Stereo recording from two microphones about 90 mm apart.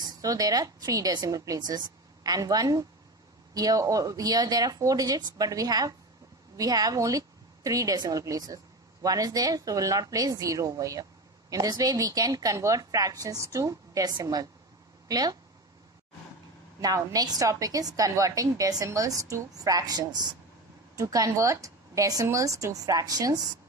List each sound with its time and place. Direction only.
0.2 s a woman's voice: 45° right (ahead or behind)
16.8 s a woman's voice: 45° right (ahead or behind)